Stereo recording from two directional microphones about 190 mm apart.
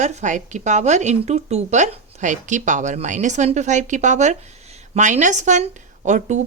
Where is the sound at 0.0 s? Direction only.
40° right (ahead or behind).